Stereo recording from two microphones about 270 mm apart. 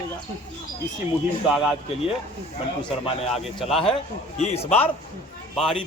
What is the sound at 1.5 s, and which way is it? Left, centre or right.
Speech, centre.